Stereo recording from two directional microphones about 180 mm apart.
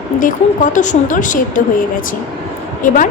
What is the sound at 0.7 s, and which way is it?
Speech, 45° left (ahead or behind).